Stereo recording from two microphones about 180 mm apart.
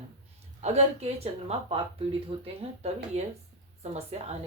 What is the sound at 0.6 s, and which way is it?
Speech, 40° right (ahead or behind).